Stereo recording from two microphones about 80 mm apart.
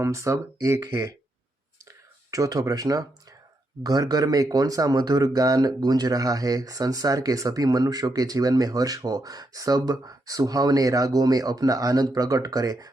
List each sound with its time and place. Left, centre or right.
0.0 s speech: right
2.3 s speech: right